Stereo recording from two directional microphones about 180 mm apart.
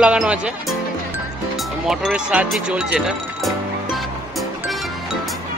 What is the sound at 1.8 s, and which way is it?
Music, 5° right (ahead or behind).